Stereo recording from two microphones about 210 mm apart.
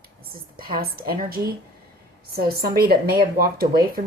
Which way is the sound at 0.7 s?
45° right (ahead or behind).